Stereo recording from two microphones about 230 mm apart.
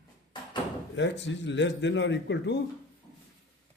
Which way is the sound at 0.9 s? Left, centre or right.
Left.